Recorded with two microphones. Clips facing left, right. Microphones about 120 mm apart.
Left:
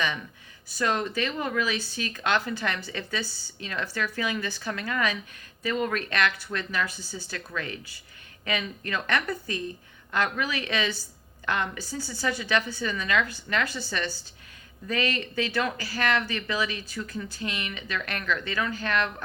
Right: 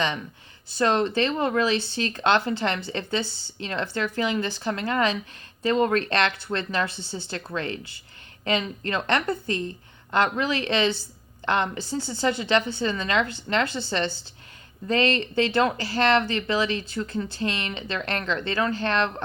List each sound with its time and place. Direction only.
0.7 s speech: 25° right (ahead or behind)